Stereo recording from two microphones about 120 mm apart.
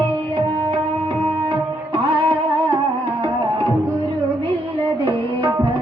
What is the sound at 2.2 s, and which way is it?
Music, 50° right (ahead or behind).